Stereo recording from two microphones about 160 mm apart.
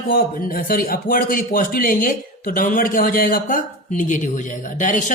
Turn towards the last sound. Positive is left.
turn(degrees=55)  # may be behind; listen again after turning